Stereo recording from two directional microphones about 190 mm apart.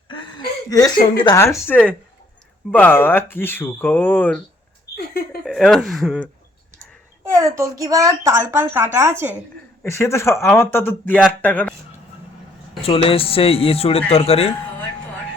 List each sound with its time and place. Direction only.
0.1 s speech: 25° left (ahead or behind)
1.6 s speech: 5° left (ahead or behind)
4.9 s a sound: 55° left (ahead or behind)
5.5 s speech: centre (ahead or behind)
7.3 s a woman's voice: 15° right (ahead or behind)
9.8 s speech: 15° left (ahead or behind)
12.8 s a man's voice: 30° left (ahead or behind)